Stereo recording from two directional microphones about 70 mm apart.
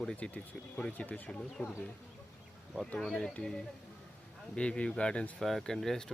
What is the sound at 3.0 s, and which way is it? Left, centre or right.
Speech, centre.